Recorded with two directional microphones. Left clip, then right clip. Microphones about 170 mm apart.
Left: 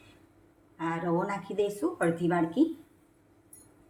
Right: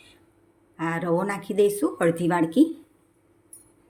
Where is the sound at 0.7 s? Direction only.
55° right (ahead or behind).